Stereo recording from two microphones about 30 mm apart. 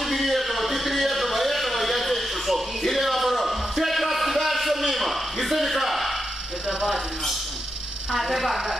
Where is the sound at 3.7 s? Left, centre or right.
Centre.